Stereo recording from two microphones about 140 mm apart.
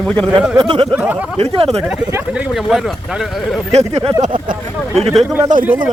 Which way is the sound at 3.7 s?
50° right (ahead or behind).